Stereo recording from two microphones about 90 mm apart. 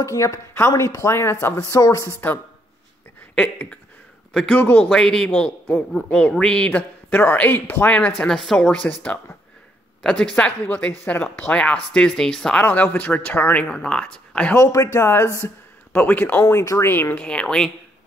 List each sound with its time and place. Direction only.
0.0 s speech: 35° left (ahead or behind)
3.3 s a man's voice: 10° left (ahead or behind)
4.6 s speech: 20° left (ahead or behind)
4.8 s speech: 5° left (ahead or behind)
8.2 s speech: 5° left (ahead or behind)
12.6 s speech: 15° left (ahead or behind)
14.5 s speech: 35° left (ahead or behind)
15.9 s speech: 20° left (ahead or behind)
17.2 s speech: 10° left (ahead or behind)